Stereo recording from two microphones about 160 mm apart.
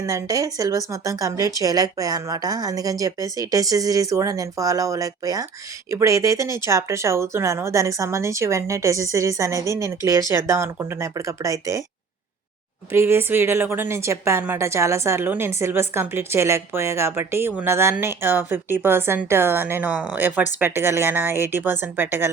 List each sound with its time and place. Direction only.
0.0 s speech: 20° right (ahead or behind)
12.9 s a woman's voice: 15° right (ahead or behind)